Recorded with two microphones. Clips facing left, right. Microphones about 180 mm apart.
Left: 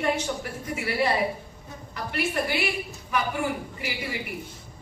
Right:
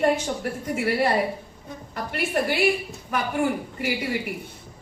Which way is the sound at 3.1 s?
50° right (ahead or behind).